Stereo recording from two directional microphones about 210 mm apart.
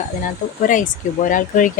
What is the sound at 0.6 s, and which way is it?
Speech, 40° left (ahead or behind).